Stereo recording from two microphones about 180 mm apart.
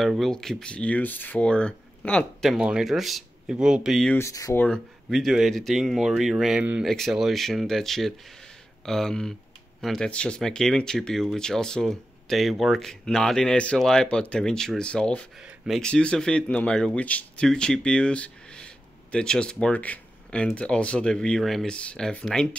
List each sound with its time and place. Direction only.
0.0 s speech: centre (ahead or behind)
4.2 s speech: 20° left (ahead or behind)
4.6 s speech: centre (ahead or behind)